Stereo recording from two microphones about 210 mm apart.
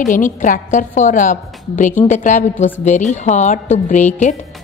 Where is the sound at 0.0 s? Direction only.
40° left (ahead or behind).